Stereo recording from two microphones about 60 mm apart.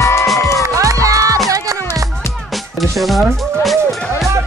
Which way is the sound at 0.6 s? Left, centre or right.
Right.